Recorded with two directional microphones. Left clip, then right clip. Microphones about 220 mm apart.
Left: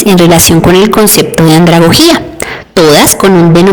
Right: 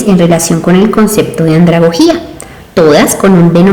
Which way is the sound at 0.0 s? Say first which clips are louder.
Left 4 dB; 40° left (ahead or behind).